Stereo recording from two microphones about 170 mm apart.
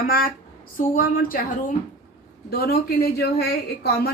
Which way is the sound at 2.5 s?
65° left (ahead or behind).